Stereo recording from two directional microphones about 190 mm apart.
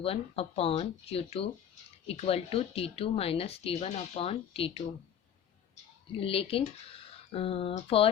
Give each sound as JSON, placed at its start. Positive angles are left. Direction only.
{"t": 0.0, "sound": "speech", "side_deg": 30}
{"t": 6.1, "sound": "speech", "side_deg": 30}